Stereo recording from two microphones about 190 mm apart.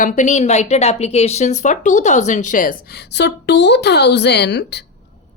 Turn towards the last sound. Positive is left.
turn(degrees=60)  # may be behind; listen again after turning